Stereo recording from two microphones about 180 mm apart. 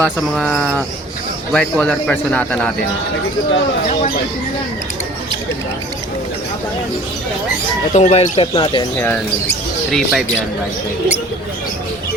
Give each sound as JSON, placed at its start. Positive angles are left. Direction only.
{"t": 0.0, "sound": "a man's voice", "side_deg": 5}
{"t": 7.9, "sound": "speech", "side_deg": 35}
{"t": 9.9, "sound": "speech", "side_deg": 0}